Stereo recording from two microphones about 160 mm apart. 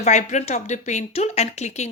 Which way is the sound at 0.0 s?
45° left (ahead or behind).